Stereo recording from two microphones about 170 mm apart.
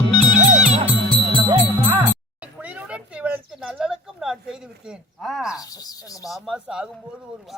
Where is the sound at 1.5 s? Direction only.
20° right (ahead or behind).